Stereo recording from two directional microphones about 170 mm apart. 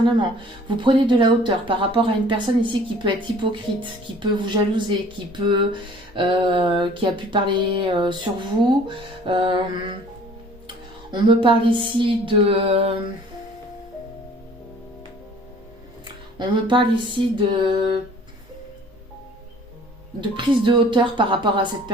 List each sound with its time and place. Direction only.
0.2 s speech: 30° right (ahead or behind)
9.2 s music: 30° right (ahead or behind)
16.4 s speech: 30° right (ahead or behind)
20.3 s speech: 30° right (ahead or behind)